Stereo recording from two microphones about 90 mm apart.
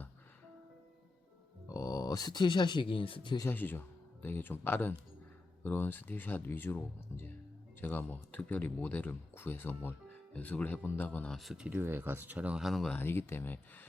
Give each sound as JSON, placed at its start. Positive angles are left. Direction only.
{"t": 1.6, "sound": "speech", "side_deg": 35}
{"t": 3.5, "sound": "speech", "side_deg": 20}
{"t": 11.3, "sound": "speech", "side_deg": 0}
{"t": 11.7, "sound": "speech", "side_deg": -25}
{"t": 12.6, "sound": "speech", "side_deg": 0}
{"t": 13.0, "sound": "speech", "side_deg": 25}